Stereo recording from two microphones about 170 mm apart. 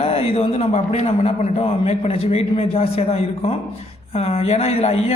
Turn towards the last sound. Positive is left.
turn(degrees=40)  # may be behind; listen again after turning